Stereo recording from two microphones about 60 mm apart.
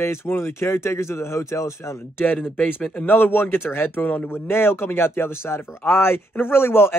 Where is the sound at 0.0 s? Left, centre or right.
Left.